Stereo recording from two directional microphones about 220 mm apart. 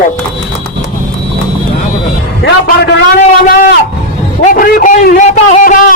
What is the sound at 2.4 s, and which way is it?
Speech, 45° left (ahead or behind).